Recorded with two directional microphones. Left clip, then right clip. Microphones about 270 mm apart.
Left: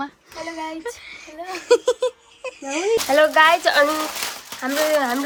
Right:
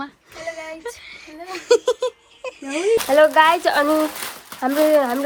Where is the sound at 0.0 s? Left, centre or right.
Centre.